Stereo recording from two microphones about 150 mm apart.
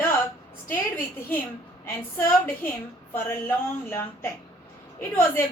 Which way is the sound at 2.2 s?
15° left (ahead or behind).